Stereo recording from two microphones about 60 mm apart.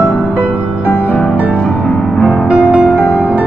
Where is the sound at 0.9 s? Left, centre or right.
Left.